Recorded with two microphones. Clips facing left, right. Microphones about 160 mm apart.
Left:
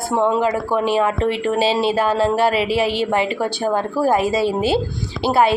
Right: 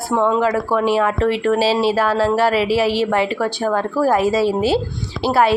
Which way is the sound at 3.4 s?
25° left (ahead or behind).